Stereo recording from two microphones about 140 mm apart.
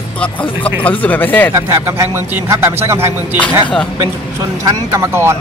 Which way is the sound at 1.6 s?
20° right (ahead or behind).